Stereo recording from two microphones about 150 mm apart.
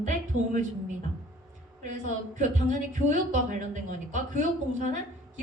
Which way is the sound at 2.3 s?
55° right (ahead or behind).